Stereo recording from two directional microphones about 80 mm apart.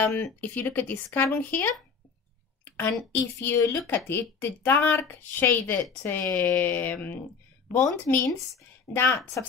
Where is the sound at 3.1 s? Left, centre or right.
Left.